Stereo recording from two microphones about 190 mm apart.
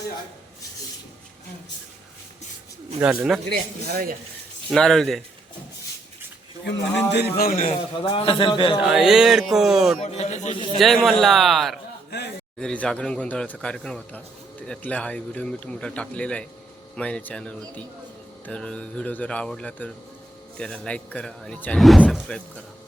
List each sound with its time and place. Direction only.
3.0 s speech: 5° right (ahead or behind)
3.5 s speech: 50° right (ahead or behind)
4.7 s speech: centre (ahead or behind)
7.1 s a man's voice: 55° left (ahead or behind)
7.7 s a man's voice: 30° left (ahead or behind)
8.8 s speech: 5° right (ahead or behind)
10.0 s speech: 35° left (ahead or behind)
10.8 s speech: centre (ahead or behind)
12.1 s a sound: 65° left (ahead or behind)
12.5 s speech: 5° left (ahead or behind)